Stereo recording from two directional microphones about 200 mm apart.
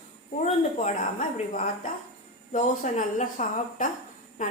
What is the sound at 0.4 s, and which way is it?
A woman's voice, 40° left (ahead or behind).